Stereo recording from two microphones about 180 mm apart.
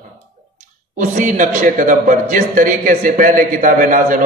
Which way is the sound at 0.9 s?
45° right (ahead or behind).